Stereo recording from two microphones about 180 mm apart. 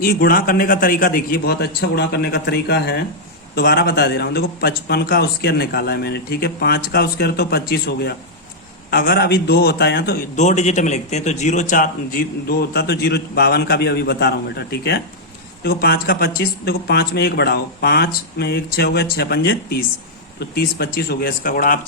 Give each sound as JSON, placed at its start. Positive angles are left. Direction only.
{"t": 0.0, "sound": "a man's voice", "side_deg": 55}
{"t": 10.3, "sound": "a man's voice", "side_deg": 40}